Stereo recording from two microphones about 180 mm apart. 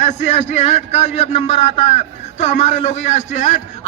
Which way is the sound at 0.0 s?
40° left (ahead or behind).